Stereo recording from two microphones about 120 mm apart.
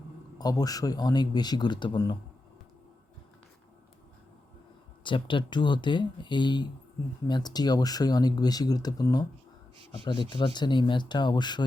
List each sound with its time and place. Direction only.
0.3 s speech: 30° left (ahead or behind)
5.0 s speech: 45° left (ahead or behind)